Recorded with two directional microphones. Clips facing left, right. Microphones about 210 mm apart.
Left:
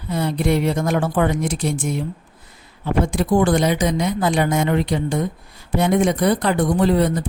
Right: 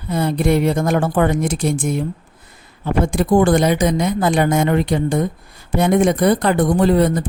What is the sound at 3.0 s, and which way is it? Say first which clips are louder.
A woman's voice: right 4 dB; 50° right (ahead or behind).